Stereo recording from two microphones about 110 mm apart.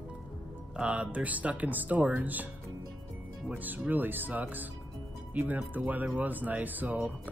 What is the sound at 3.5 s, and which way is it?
Speech, 15° right (ahead or behind).